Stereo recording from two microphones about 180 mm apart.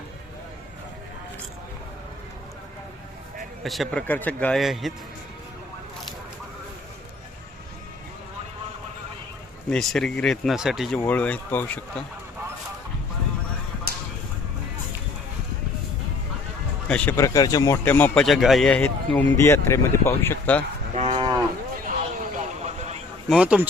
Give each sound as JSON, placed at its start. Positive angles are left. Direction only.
{"t": 3.6, "sound": "a man's voice", "side_deg": 0}
{"t": 9.6, "sound": "a man's voice", "side_deg": 5}
{"t": 16.9, "sound": "speech", "side_deg": 10}
{"t": 20.9, "sound": "cattle", "side_deg": -35}
{"t": 21.8, "sound": "a sound", "side_deg": -45}
{"t": 23.3, "sound": "a man's voice", "side_deg": -5}